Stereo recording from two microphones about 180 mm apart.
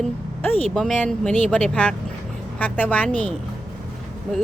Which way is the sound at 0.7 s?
Centre (ahead or behind).